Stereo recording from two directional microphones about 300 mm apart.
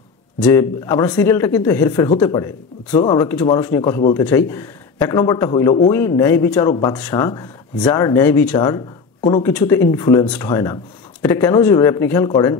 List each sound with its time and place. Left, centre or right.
0.4 s a man's voice: centre
2.9 s speech: left
3.2 s a man's voice: centre